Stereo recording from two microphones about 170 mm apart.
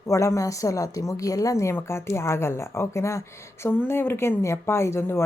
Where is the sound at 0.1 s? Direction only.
20° left (ahead or behind).